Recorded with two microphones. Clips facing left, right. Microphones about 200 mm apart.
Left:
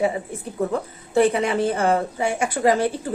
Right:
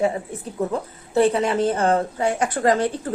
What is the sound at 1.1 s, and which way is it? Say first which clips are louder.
Speech: even; 10° left (ahead or behind).